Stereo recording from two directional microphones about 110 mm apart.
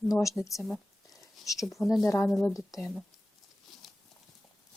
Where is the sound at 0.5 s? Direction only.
Centre (ahead or behind).